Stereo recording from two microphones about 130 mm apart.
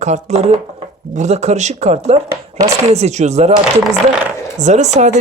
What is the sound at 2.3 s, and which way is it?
Speech, 25° right (ahead or behind).